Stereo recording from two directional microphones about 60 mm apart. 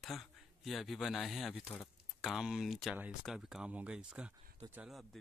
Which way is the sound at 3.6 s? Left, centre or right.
Centre.